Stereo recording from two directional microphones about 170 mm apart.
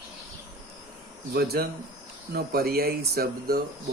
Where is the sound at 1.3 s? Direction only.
65° right (ahead or behind).